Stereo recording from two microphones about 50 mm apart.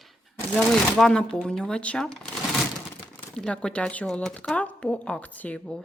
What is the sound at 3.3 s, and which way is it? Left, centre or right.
Speech, centre.